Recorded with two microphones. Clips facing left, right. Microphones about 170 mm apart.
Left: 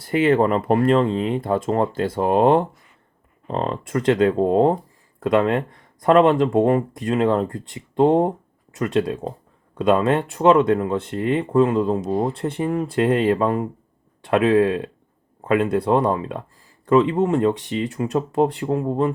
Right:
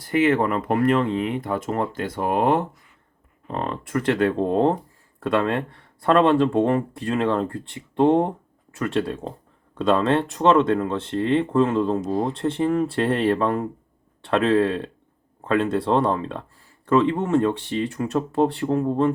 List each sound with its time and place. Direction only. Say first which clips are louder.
0.1 s speech: left 2 dB; 30° left (ahead or behind)